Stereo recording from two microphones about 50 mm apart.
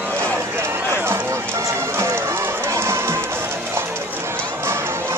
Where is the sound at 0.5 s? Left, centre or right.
Right.